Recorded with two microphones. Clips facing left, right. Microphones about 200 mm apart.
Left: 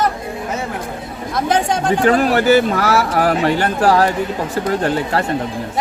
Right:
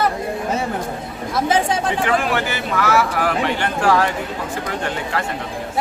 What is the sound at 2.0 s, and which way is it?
Speech, 40° left (ahead or behind).